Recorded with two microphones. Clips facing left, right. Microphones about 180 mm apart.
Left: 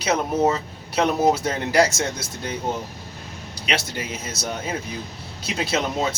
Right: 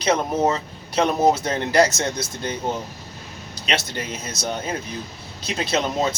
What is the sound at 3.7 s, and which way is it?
Speech, 10° left (ahead or behind).